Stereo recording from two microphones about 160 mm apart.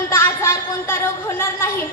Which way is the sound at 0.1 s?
15° left (ahead or behind).